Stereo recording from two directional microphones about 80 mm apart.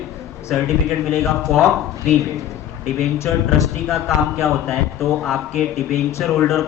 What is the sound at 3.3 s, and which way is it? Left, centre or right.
A man's voice, centre.